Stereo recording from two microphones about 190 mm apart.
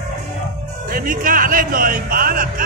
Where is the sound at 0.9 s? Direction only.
50° right (ahead or behind).